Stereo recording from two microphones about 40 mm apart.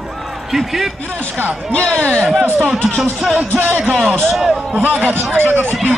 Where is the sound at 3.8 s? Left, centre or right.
Right.